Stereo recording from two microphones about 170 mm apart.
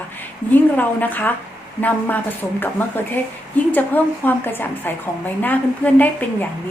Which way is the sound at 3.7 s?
10° left (ahead or behind).